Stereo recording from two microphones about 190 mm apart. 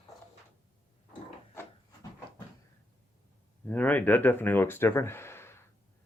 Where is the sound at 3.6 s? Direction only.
10° left (ahead or behind).